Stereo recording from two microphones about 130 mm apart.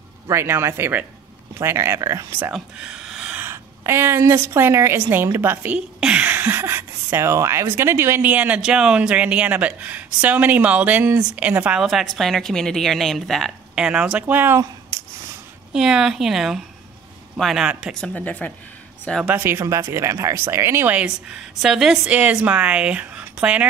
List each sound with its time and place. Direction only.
0.3 s speech: 20° right (ahead or behind)
2.5 s a woman's voice: 5° right (ahead or behind); by 15.0 s 20° right (ahead or behind)
15.7 s a woman's voice: 5° right (ahead or behind)
18.0 s a woman's voice: 10° left (ahead or behind)
19.2 s speech: 15° right (ahead or behind)